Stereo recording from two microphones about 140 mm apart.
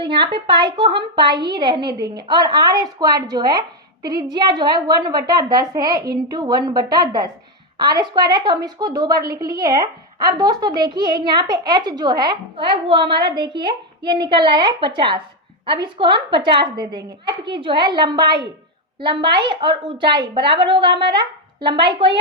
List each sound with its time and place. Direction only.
0.0 s a woman's voice: 35° right (ahead or behind)